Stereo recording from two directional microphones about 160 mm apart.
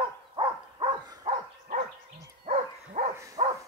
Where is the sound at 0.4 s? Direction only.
25° right (ahead or behind).